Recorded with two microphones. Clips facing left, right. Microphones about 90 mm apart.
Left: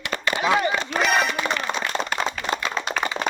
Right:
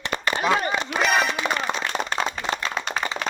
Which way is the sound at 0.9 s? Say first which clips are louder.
Right 1 dB; centre (ahead or behind).